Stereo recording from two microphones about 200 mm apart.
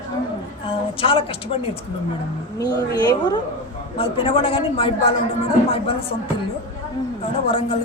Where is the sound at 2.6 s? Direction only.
20° left (ahead or behind).